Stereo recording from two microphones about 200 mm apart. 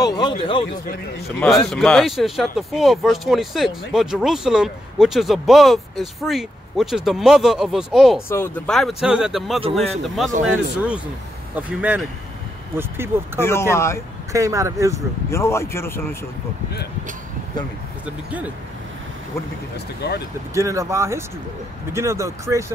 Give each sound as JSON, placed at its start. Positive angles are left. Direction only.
{"t": 0.0, "sound": "speech", "side_deg": 20}
{"t": 1.4, "sound": "speech", "side_deg": 5}
{"t": 8.3, "sound": "speech", "side_deg": 10}
{"t": 13.4, "sound": "speech", "side_deg": 10}
{"t": 14.3, "sound": "speech", "side_deg": -15}
{"t": 15.2, "sound": "speech", "side_deg": 15}
{"t": 20.0, "sound": "speech", "side_deg": 55}
{"t": 20.5, "sound": "speech", "side_deg": -15}